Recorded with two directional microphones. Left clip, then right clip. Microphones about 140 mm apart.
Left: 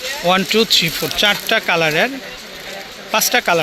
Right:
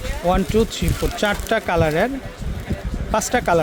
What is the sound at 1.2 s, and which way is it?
Speech, 35° right (ahead or behind).